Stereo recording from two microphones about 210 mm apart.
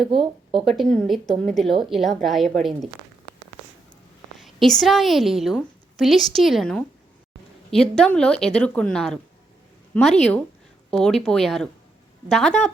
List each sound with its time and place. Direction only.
0.1 s speech: 25° right (ahead or behind)
0.6 s a woman's voice: centre (ahead or behind)
4.4 s a woman's voice: centre (ahead or behind)